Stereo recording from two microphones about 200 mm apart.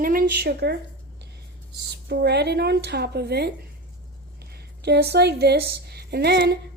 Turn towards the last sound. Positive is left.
turn(degrees=-55)  # may be behind; listen again after turning